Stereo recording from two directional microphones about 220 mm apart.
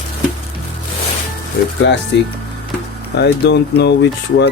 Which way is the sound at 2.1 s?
55° left (ahead or behind).